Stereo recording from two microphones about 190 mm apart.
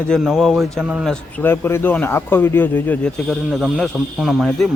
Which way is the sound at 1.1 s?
10° left (ahead or behind).